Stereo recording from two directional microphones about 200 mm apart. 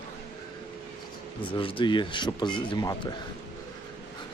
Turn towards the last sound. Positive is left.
turn(degrees=20)  # may be behind; listen again after turning